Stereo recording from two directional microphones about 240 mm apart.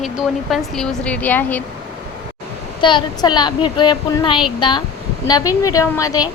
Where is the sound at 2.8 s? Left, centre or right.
Centre.